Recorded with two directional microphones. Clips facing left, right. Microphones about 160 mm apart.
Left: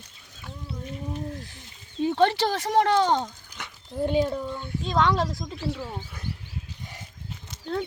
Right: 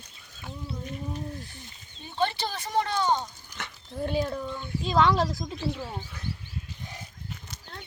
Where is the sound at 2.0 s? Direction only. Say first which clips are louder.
Left 8 dB; 90° left.